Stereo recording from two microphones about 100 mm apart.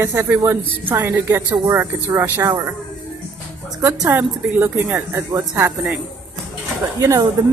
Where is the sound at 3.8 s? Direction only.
25° right (ahead or behind).